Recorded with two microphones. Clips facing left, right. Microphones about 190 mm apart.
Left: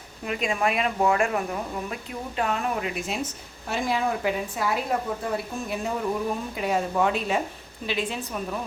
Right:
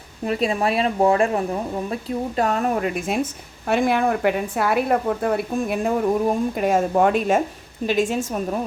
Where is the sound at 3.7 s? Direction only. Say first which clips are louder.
Right 7 dB; 60° right (ahead or behind).